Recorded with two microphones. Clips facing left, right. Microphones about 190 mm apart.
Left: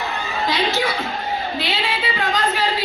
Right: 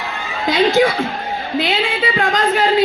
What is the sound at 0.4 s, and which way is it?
A man's voice, 50° right (ahead or behind).